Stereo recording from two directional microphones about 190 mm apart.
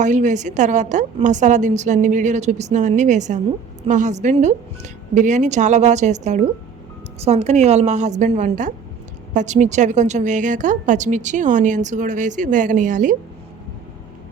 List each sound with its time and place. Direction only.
0.0 s a woman's voice: 40° right (ahead or behind)